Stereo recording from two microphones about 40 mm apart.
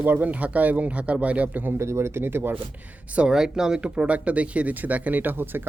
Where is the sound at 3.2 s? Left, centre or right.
Centre.